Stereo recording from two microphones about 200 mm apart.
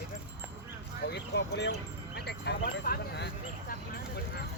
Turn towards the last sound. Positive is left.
turn(degrees=55)  # may be behind; listen again after turning